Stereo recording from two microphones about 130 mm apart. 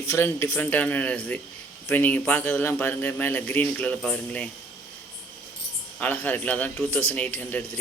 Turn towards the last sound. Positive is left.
turn(degrees=15)  # may be behind; listen again after turning